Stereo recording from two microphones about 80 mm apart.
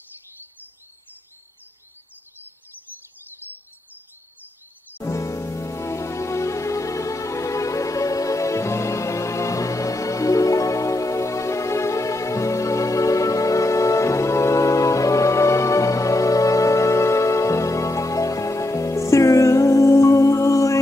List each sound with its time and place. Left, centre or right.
5.0 s music: left